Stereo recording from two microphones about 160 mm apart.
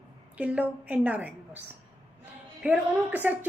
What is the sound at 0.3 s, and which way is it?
Speech, 10° right (ahead or behind).